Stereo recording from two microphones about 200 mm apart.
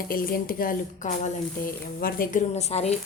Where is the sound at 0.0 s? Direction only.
45° left (ahead or behind).